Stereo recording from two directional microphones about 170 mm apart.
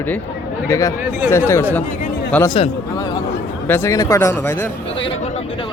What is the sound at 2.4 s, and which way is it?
Speech, 30° left (ahead or behind).